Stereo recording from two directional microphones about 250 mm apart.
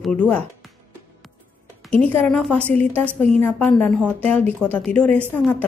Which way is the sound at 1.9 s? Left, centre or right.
Centre.